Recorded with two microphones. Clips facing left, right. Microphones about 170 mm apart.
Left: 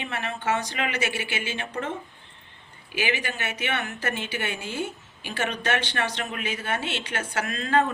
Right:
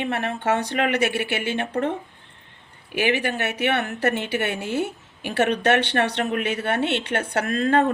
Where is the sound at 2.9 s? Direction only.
60° right (ahead or behind).